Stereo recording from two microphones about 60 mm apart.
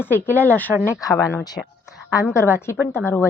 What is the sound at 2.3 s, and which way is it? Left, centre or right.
Speech, left.